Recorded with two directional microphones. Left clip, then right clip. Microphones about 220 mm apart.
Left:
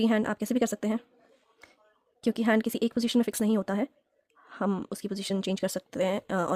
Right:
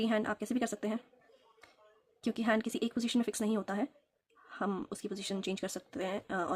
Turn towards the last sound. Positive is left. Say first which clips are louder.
# left 7 dB
turn(degrees=45)  # may be behind; listen again after turning